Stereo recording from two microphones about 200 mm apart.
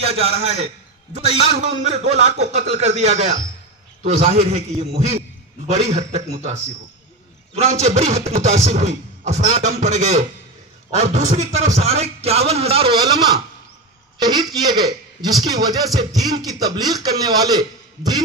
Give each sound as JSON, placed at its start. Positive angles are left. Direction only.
{"t": 0.0, "sound": "a man's voice", "side_deg": -30}
{"t": 1.8, "sound": "a man's voice", "side_deg": -35}